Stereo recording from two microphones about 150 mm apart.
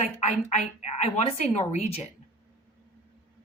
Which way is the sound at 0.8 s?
45° left (ahead or behind).